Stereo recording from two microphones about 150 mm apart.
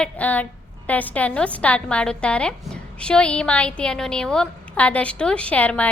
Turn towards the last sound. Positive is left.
turn(degrees=10)  # may be behind; listen again after turning